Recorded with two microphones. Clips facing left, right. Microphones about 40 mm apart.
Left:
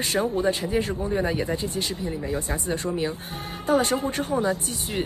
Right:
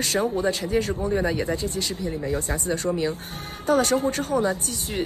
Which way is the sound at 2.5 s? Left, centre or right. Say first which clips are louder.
Right 2 dB; centre.